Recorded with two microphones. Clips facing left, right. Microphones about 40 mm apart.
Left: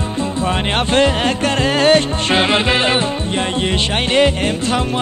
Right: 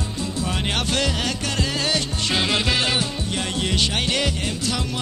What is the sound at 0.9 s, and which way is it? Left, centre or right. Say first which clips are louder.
Music: left 9 dB; left.